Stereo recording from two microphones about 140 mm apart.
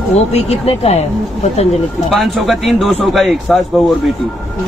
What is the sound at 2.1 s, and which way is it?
A man's voice, centre (ahead or behind).